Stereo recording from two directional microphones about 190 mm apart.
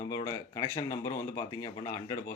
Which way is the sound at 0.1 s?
20° left (ahead or behind).